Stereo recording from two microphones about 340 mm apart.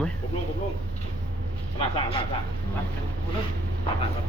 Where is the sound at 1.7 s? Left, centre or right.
Centre.